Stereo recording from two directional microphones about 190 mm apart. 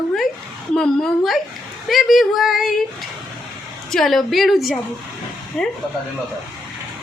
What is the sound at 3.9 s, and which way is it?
A woman's voice, centre (ahead or behind).